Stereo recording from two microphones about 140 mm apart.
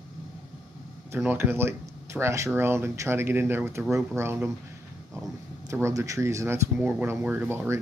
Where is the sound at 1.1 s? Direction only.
15° right (ahead or behind).